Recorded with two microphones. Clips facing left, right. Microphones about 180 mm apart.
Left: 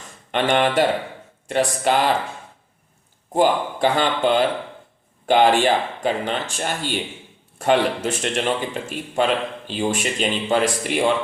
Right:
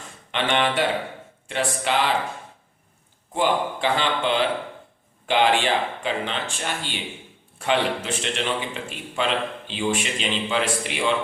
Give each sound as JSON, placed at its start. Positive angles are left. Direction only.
{"t": 0.3, "sound": "speech", "side_deg": 45}
{"t": 3.3, "sound": "speech", "side_deg": 45}